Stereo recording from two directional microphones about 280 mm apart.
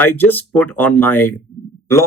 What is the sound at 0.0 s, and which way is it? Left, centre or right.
Speech, centre.